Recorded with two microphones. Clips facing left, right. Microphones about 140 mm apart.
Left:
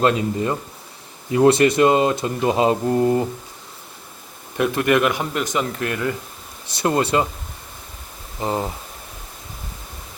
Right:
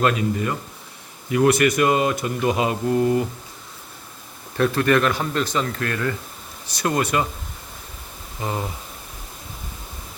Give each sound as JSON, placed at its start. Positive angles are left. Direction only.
{"t": 0.0, "sound": "speech", "side_deg": 25}
{"t": 4.5, "sound": "a man's voice", "side_deg": 15}
{"t": 8.4, "sound": "speech", "side_deg": 25}